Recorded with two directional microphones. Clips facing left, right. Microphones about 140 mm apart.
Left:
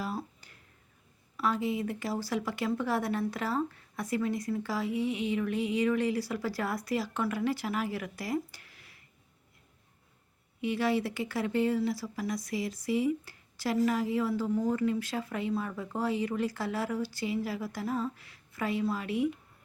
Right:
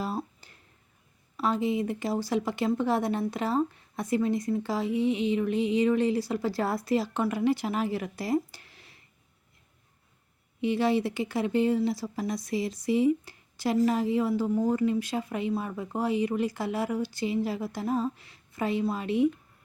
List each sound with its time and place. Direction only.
0.0 s a sound: 25° right (ahead or behind)
1.4 s speech: 25° right (ahead or behind)
10.6 s speech: 25° right (ahead or behind)